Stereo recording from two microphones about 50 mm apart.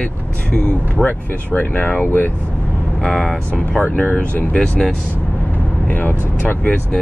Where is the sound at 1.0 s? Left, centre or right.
Left.